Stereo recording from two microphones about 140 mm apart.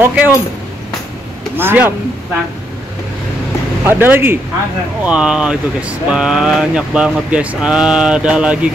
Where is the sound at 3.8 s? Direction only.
15° right (ahead or behind).